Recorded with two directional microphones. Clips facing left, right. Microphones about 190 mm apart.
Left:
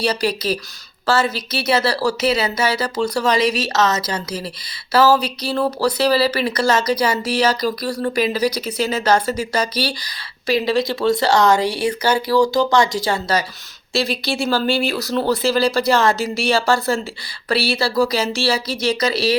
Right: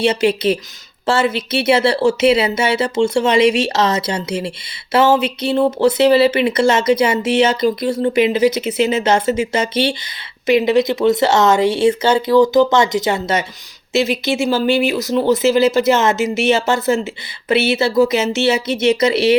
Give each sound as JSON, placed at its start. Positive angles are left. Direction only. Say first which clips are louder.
{"t": 0.0, "sound": "speech", "louder": "right 5 dB", "side_deg": -25}